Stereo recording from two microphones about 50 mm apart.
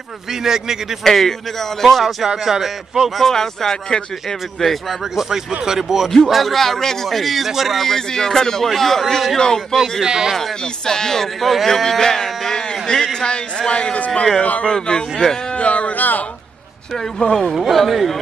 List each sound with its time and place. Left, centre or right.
0.3 s speech: centre
1.0 s a man's voice: centre
2.2 s speech: centre
3.2 s speech: centre
5.7 s a man's voice: centre
10.0 s speech: centre
10.3 s speech: centre; by 14.7 s left
14.7 s speech: centre
15.5 s speech: left
17.2 s speech: centre
17.6 s a man's voice: centre